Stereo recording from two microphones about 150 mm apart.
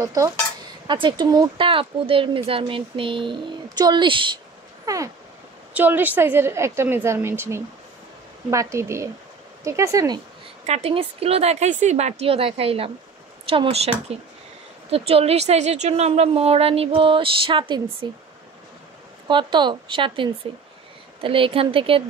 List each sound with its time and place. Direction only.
0.0 s a woman's voice: 20° right (ahead or behind)
4.8 s a sound: 20° right (ahead or behind)
5.7 s a woman's voice: 10° right (ahead or behind)
10.7 s a woman's voice: 40° right (ahead or behind)
19.2 s a woman's voice: 30° right (ahead or behind)